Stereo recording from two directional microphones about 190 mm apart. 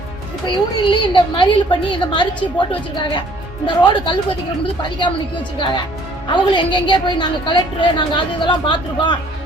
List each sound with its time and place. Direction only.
0.4 s a woman's voice: 25° left (ahead or behind)
6.2 s a woman's voice: 25° left (ahead or behind)